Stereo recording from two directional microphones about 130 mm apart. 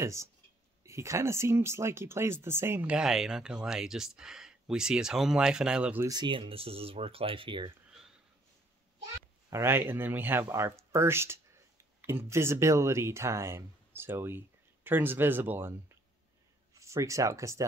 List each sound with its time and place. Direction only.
0.0 s speech: 20° right (ahead or behind)
6.0 s speech: 35° right (ahead or behind)
9.5 s speech: 20° right (ahead or behind)